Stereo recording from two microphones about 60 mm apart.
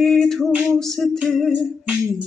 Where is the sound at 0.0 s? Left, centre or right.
Centre.